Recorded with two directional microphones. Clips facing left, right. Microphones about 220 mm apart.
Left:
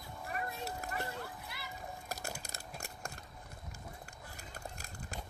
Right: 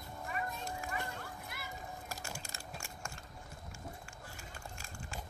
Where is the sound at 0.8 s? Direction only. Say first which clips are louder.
Even; 40° left (ahead or behind).